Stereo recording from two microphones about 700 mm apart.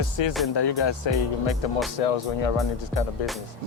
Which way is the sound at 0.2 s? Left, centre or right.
Left.